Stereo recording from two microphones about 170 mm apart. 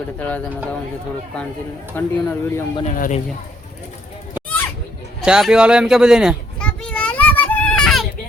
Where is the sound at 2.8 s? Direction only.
45° left (ahead or behind).